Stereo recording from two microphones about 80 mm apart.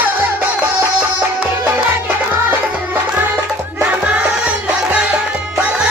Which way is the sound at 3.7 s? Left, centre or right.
Centre.